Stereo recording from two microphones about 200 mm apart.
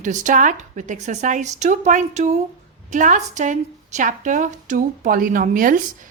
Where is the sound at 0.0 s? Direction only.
40° right (ahead or behind).